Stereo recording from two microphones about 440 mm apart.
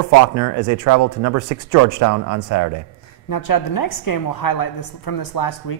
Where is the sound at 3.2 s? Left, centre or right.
Left.